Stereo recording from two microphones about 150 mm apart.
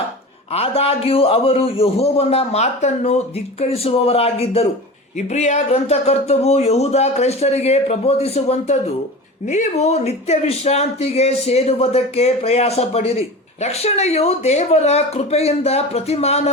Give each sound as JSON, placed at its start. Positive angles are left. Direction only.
{"t": 0.5, "sound": "a man's voice", "side_deg": 40}